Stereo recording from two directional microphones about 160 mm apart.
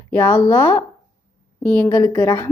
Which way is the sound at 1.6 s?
10° left (ahead or behind).